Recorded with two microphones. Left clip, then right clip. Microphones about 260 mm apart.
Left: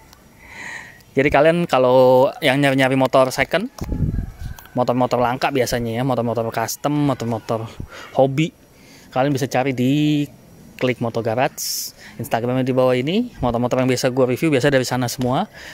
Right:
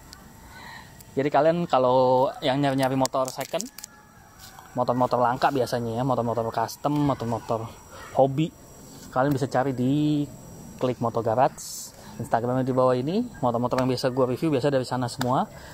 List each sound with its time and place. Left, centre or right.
1.1 s speech: left
4.7 s speech: left